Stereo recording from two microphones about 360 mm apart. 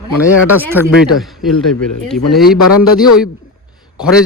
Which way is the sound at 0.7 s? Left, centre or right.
Centre.